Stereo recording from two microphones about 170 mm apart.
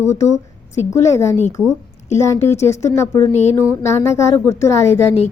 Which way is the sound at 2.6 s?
15° left (ahead or behind).